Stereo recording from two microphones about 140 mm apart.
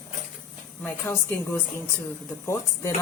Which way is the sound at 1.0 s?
15° left (ahead or behind).